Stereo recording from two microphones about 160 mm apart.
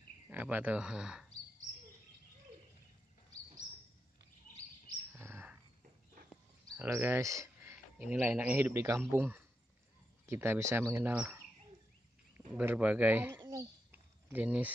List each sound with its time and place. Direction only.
0.3 s speech: 10° right (ahead or behind)
5.1 s bird: 15° right (ahead or behind)
6.8 s speech: 15° right (ahead or behind)
12.4 s a sound: 10° right (ahead or behind)